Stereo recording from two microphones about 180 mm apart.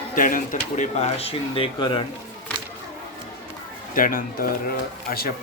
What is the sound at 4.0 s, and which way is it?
Speech, 50° left (ahead or behind).